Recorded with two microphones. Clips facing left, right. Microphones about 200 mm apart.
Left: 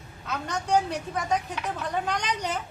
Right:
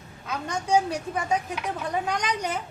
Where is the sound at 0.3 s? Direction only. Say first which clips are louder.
Right 1 dB; 10° right (ahead or behind).